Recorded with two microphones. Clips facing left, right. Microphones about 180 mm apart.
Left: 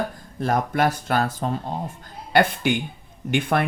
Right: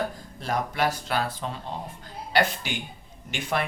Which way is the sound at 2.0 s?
55° left (ahead or behind).